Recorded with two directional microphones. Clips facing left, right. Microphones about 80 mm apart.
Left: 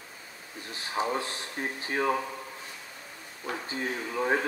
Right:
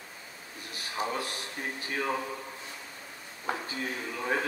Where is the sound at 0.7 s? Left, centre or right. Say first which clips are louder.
Left 3 dB; left.